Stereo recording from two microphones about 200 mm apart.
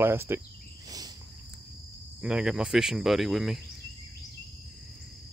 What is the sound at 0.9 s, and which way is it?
Cricket, 20° right (ahead or behind).